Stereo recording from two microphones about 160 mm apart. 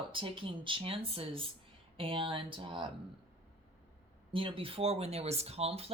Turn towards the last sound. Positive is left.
turn(degrees=-40)  # may be behind; listen again after turning